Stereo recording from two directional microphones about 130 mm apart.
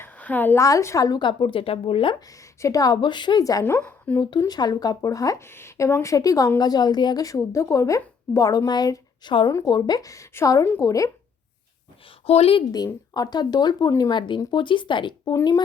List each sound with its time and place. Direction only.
0.0 s speech: 15° left (ahead or behind); by 2.1 s 40° left (ahead or behind)
2.4 s speech: 25° left (ahead or behind)
4.2 s speech: 30° left (ahead or behind)
9.5 s speech: 25° left (ahead or behind)
12.2 s a woman's voice: 50° left (ahead or behind)
12.7 s speech: 30° left (ahead or behind)
15.2 s speech: 20° left (ahead or behind)